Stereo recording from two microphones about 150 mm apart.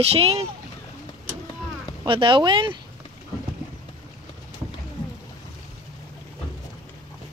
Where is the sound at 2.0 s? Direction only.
35° right (ahead or behind).